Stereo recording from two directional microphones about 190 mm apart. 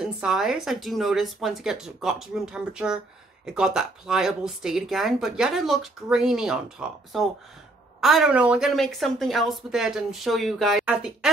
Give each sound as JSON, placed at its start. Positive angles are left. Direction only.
{"t": 0.0, "sound": "speech", "side_deg": 0}